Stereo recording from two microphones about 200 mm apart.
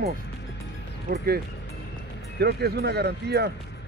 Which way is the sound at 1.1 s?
50° right (ahead or behind).